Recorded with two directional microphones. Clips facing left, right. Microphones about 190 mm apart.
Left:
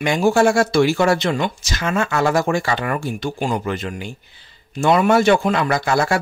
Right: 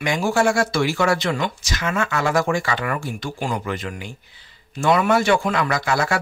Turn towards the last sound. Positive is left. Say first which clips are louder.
# left 3 dB
turn(degrees=30)  # may be behind; listen again after turning